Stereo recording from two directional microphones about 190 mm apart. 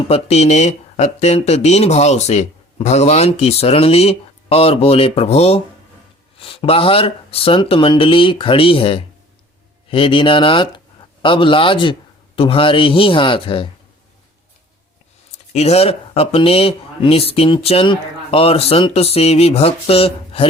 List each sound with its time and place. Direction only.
0.1 s speech: 35° left (ahead or behind)
15.5 s speech: 35° left (ahead or behind)